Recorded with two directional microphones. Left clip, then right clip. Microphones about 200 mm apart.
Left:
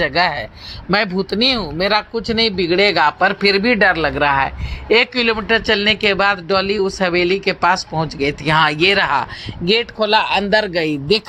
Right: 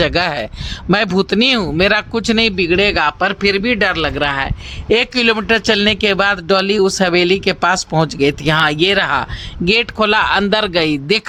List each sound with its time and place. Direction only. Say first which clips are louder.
0.0 s speech: right 1 dB; 30° right (ahead or behind)